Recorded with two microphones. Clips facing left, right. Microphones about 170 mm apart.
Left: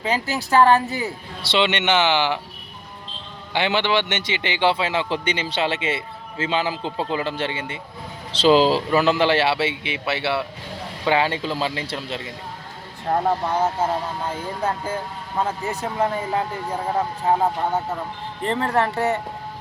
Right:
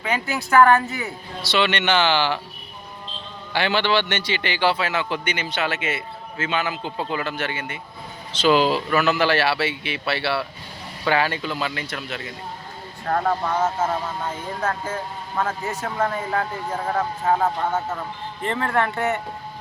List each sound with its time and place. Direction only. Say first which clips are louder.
0.0 s a man's voice: left 2 dB; 35° left (ahead or behind); by 2.4 s 20° left (ahead or behind)
3.5 s a man's voice: even; 20° left (ahead or behind)
13.1 s a man's voice: left 1 dB; 20° left (ahead or behind)
15.4 s speech: left 1 dB; 15° left (ahead or behind)
18.4 s speech: left 2 dB; 35° left (ahead or behind)